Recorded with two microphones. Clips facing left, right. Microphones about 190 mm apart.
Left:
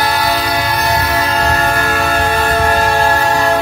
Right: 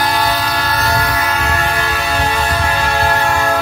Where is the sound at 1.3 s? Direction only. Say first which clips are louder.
Left 3 dB; 35° left (ahead or behind).